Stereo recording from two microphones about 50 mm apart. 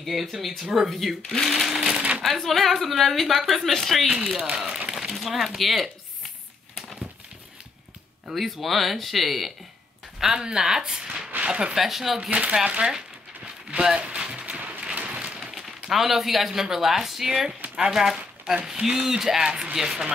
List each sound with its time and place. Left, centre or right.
0.0 s a woman's voice: centre
2.2 s a woman's voice: centre
4.6 s speech: centre
8.3 s a woman's voice: centre
10.2 s speech: centre
11.3 s a sound: right
11.7 s a woman's voice: centre
12.3 s speech: right
13.7 s a sound: right
15.4 s speech: centre